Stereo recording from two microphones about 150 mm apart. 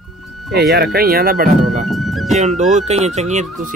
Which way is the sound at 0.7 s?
90° right.